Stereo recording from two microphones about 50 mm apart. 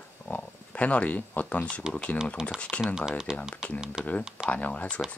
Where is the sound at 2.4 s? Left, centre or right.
Centre.